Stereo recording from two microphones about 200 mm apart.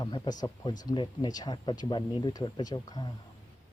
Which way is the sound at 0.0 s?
20° left (ahead or behind).